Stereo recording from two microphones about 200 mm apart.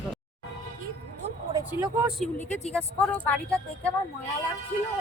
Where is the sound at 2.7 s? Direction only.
5° left (ahead or behind).